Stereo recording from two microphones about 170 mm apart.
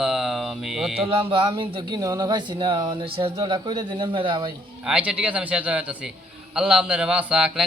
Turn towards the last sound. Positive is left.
turn(degrees=-5)  # may be behind; listen again after turning